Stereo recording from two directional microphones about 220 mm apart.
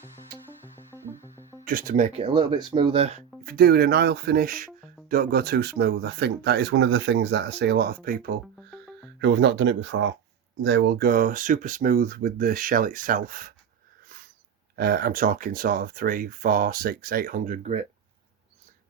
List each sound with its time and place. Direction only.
1.4 s music: 10° right (ahead or behind)
1.6 s speech: 40° right (ahead or behind)
9.1 s speech: 55° right (ahead or behind)
14.8 s speech: 45° right (ahead or behind)